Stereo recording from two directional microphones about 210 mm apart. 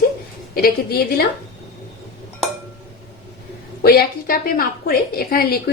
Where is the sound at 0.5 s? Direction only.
45° left (ahead or behind).